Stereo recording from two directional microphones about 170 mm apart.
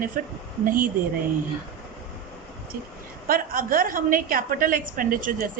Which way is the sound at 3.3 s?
55° right (ahead or behind).